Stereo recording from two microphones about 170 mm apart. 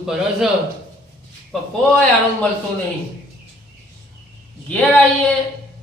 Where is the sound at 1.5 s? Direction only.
5° left (ahead or behind).